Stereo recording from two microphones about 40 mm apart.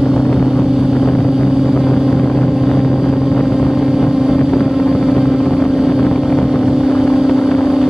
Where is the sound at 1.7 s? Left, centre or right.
Centre.